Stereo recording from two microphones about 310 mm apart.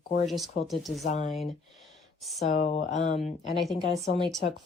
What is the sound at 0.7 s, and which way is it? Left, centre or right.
Speech, centre.